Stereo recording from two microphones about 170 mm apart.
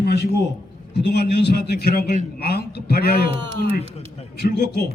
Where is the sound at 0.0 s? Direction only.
75° left (ahead or behind).